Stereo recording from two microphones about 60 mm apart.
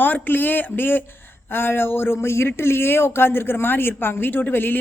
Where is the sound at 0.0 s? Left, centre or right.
Left.